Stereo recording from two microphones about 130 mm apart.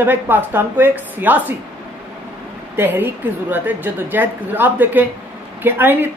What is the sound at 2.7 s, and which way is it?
A man's voice, 15° right (ahead or behind).